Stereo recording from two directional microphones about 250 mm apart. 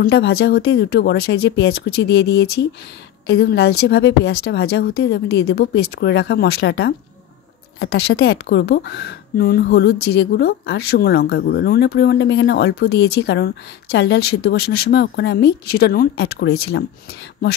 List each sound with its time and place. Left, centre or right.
0.0 s a woman's voice: left